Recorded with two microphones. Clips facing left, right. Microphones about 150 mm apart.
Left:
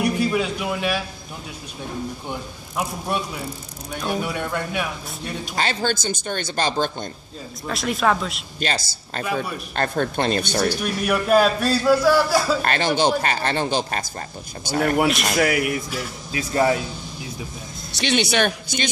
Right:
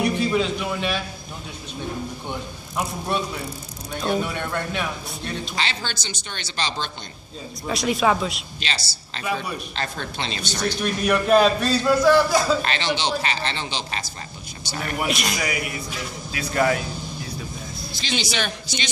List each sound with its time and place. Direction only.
0.0 s a man's voice: 10° left (ahead or behind)
3.1 s speech: 10° left (ahead or behind)
5.6 s speech: 45° left (ahead or behind)
7.6 s a man's voice: centre (ahead or behind)
8.5 s speech: 50° left (ahead or behind)
10.7 s a man's voice: 5° left (ahead or behind)
12.6 s speech: 50° left (ahead or behind); by 15.8 s 65° left (ahead or behind)
16.3 s speech: 30° left (ahead or behind)
17.9 s speech: 65° left (ahead or behind)